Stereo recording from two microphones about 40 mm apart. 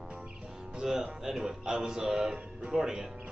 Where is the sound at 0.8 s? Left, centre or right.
Centre.